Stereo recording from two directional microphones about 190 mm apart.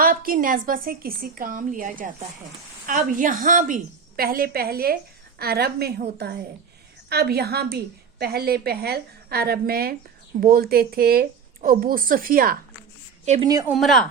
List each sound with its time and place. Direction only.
0.0 s a woman's voice: 50° right (ahead or behind)
7.1 s a woman's voice: 55° right (ahead or behind)
13.4 s a woman's voice: 20° right (ahead or behind)
13.7 s speech: centre (ahead or behind)